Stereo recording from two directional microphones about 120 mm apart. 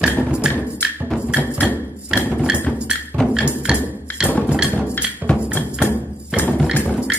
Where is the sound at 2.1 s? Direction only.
10° right (ahead or behind).